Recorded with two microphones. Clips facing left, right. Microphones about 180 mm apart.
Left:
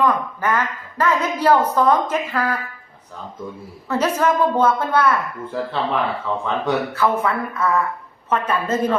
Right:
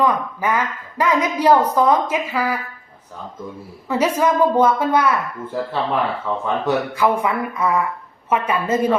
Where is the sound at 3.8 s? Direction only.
10° right (ahead or behind).